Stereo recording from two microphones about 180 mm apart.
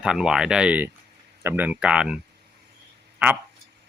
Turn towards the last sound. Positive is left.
turn(degrees=-10)  # may be behind; listen again after turning